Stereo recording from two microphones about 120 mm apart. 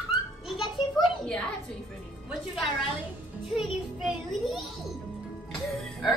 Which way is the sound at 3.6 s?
Centre (ahead or behind).